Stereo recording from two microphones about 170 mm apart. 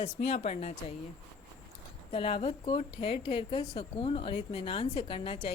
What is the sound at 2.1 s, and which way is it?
Speech, 30° left (ahead or behind).